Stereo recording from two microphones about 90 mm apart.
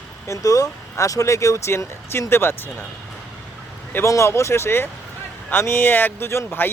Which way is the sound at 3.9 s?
30° left (ahead or behind).